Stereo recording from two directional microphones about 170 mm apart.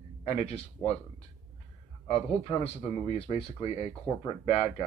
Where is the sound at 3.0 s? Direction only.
35° left (ahead or behind).